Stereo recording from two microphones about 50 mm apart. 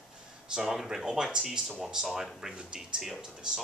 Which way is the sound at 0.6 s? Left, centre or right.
Centre.